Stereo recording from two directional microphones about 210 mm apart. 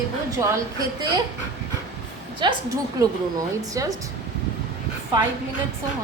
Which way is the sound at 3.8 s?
15° right (ahead or behind).